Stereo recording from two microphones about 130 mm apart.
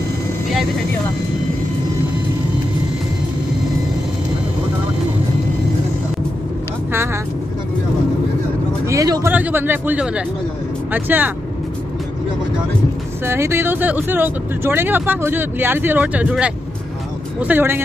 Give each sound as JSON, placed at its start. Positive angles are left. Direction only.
{"t": 8.8, "sound": "a sound", "side_deg": -25}
{"t": 9.3, "sound": "speech", "side_deg": -15}
{"t": 13.2, "sound": "speech", "side_deg": -20}